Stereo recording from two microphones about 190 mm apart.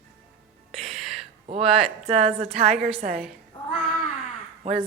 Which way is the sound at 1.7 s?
35° right (ahead or behind).